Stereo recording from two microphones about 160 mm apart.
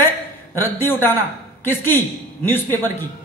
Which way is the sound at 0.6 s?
15° left (ahead or behind).